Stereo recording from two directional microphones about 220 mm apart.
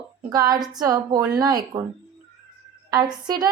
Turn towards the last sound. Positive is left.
turn(degrees=-20)  # may be behind; listen again after turning